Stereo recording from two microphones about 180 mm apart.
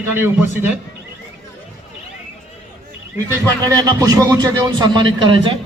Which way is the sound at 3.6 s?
20° right (ahead or behind).